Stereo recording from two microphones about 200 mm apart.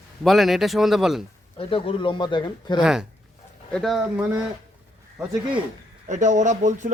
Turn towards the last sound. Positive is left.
turn(degrees=-40)  # may be behind; listen again after turning